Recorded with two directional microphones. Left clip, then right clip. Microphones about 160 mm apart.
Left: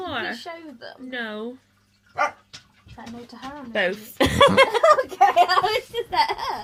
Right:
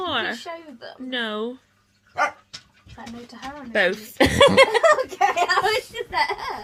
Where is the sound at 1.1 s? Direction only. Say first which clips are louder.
Right 4 dB; 45° right (ahead or behind).